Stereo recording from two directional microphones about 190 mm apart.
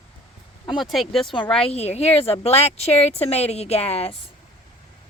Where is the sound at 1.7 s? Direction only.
35° left (ahead or behind).